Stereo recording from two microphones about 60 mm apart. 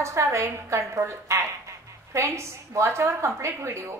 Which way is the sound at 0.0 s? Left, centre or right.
Right.